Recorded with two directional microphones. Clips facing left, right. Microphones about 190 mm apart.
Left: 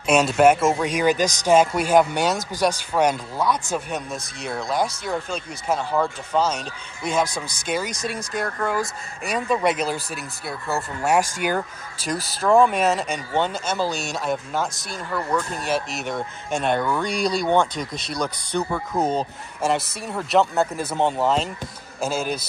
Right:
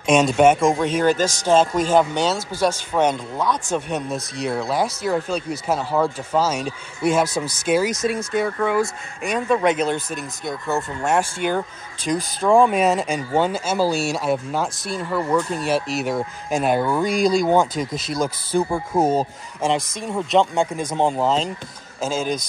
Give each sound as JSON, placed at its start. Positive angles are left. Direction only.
{"t": 0.0, "sound": "speech", "side_deg": 5}
{"t": 18.6, "sound": "speech", "side_deg": -25}
{"t": 19.6, "sound": "speech", "side_deg": 5}
{"t": 22.0, "sound": "speech", "side_deg": 10}